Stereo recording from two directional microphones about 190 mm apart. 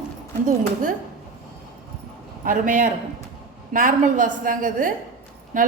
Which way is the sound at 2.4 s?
45° right (ahead or behind).